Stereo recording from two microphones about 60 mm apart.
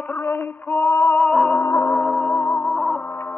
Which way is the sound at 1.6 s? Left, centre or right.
Left.